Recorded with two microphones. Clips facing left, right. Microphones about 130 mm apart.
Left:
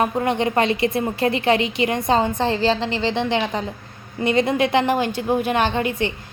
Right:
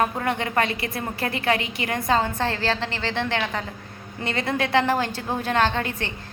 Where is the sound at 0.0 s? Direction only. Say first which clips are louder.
Left 4 dB; 20° left (ahead or behind).